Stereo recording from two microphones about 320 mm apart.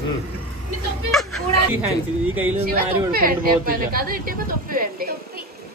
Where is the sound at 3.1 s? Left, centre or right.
Right.